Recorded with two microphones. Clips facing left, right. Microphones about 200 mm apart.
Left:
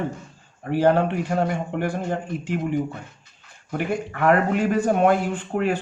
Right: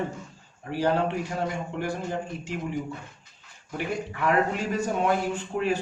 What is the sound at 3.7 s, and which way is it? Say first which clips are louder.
Speech: left 5 dB; 55° left (ahead or behind).